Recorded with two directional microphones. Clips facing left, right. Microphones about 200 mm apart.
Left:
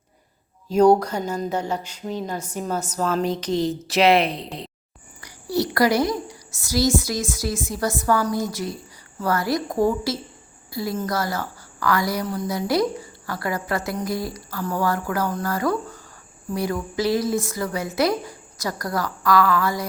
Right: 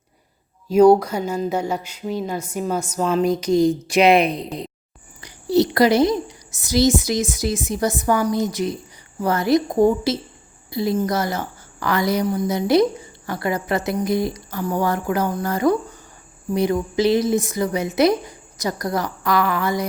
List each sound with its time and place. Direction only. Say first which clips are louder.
0.7 s a woman's voice: right 3 dB; 10° right (ahead or behind)